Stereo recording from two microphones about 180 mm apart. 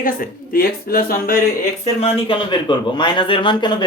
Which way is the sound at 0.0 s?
55° left (ahead or behind).